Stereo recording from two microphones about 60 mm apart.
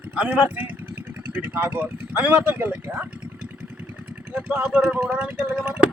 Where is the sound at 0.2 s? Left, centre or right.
Right.